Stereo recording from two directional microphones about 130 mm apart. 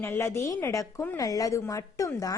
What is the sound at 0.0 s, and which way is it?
A woman's voice, 20° left (ahead or behind).